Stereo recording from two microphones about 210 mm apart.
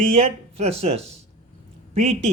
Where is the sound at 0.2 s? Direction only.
30° right (ahead or behind).